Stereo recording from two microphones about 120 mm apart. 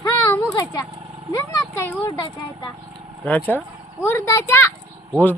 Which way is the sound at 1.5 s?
20° left (ahead or behind).